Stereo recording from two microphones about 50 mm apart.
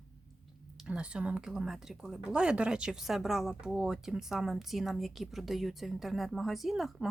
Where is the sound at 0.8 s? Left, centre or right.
Centre.